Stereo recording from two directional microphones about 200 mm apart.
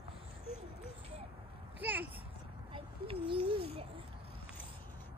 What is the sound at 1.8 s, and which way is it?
Speech, 10° right (ahead or behind).